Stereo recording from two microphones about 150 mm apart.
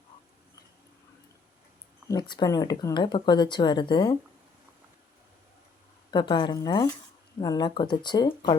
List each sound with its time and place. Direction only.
2.0 s speech: 30° left (ahead or behind)
6.1 s speech: 30° left (ahead or behind)